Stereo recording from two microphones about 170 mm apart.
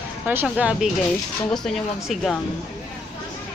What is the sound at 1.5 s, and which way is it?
Speech, centre (ahead or behind).